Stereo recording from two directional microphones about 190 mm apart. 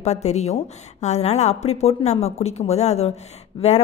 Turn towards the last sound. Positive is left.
turn(degrees=35)  # may be behind; listen again after turning